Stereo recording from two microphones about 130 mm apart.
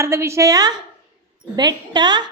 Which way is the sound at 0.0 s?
20° right (ahead or behind).